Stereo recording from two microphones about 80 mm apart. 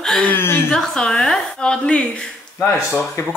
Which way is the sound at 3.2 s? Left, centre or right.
Left.